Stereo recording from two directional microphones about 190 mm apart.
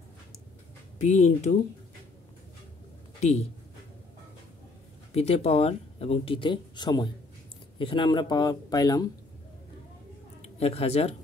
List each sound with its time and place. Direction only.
0.9 s speech: 35° left (ahead or behind)
3.2 s speech: 35° left (ahead or behind)
5.1 s speech: 35° left (ahead or behind)
10.4 s speech: 30° left (ahead or behind)